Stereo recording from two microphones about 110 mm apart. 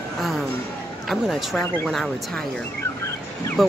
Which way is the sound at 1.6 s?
15° left (ahead or behind).